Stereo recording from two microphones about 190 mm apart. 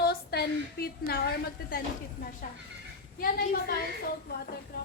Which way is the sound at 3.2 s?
55° left (ahead or behind).